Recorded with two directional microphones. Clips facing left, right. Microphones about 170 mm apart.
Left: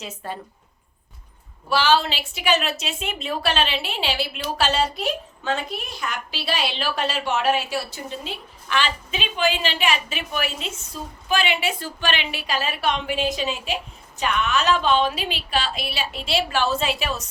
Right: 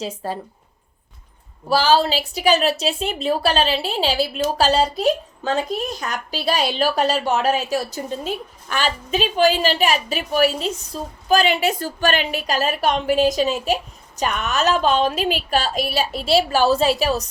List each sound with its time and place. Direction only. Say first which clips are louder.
0.2 s a woman's voice: right 4 dB; 35° right (ahead or behind)
1.7 s a woman's voice: right 3 dB; 35° right (ahead or behind)